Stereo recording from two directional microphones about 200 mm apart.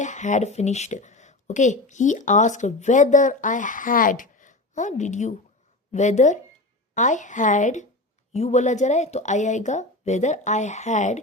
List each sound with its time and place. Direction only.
0.0 s speech: 40° left (ahead or behind)